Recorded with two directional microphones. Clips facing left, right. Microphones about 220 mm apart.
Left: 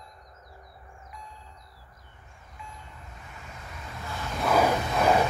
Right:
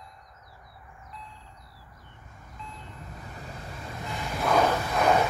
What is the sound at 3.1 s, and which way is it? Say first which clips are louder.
Vehicle: right 6 dB; 40° right (ahead or behind).